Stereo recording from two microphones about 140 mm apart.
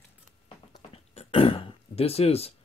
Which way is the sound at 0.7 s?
45° left (ahead or behind).